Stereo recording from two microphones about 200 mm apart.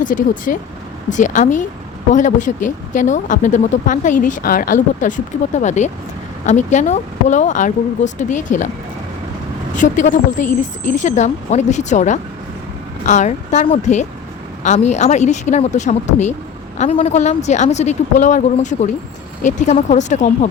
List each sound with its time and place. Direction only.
0.0 s speech: 40° left (ahead or behind)
9.7 s speech: 40° left (ahead or behind)